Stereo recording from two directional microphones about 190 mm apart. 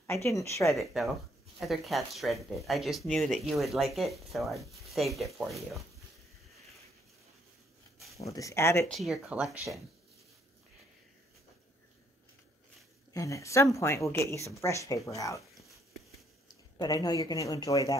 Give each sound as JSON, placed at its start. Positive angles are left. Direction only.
{"t": 0.0, "sound": "speech", "side_deg": 15}
{"t": 0.7, "sound": "speech", "side_deg": 0}
{"t": 8.3, "sound": "speech", "side_deg": 15}
{"t": 8.9, "sound": "speech", "side_deg": 0}
{"t": 13.1, "sound": "speech", "side_deg": 15}
{"t": 16.7, "sound": "speech", "side_deg": 20}